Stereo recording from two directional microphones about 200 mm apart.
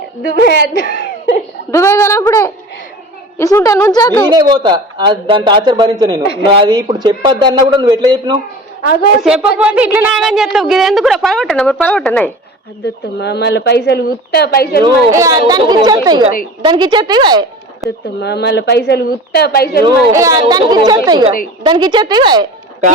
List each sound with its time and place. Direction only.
0.2 s speech: 55° left (ahead or behind)
1.7 s a woman's voice: 15° left (ahead or behind)
4.3 s a man's voice: 20° right (ahead or behind)
8.8 s a woman's voice: 50° left (ahead or behind)
9.2 s speech: 5° right (ahead or behind)
12.8 s speech: 55° left (ahead or behind)
15.1 s a man's voice: 15° right (ahead or behind)
17.8 s speech: 55° left (ahead or behind)
19.8 s a man's voice: 20° right (ahead or behind)